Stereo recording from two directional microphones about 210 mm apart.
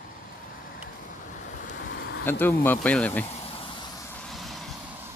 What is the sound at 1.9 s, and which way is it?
Vehicle, 50° left (ahead or behind).